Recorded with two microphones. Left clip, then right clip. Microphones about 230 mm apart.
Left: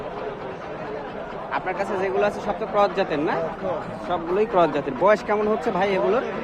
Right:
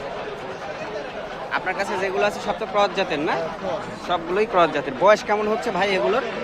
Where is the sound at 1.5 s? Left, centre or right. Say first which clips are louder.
Right 1 dB; centre.